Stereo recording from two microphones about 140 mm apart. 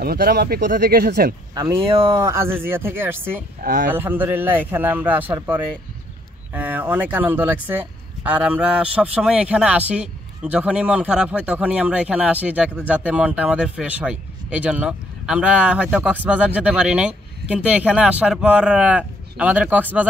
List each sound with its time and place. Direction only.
0.0 s speech: 90° right
1.5 s speech: 25° right (ahead or behind)
2.0 s speech: 40° right (ahead or behind)
2.2 s speech: 20° right (ahead or behind)
3.6 s speech: 80° right
3.9 s speech: 15° right (ahead or behind)
6.5 s speech: 10° right (ahead or behind)